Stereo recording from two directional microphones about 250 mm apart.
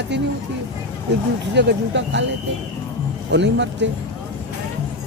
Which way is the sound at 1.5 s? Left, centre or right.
Right.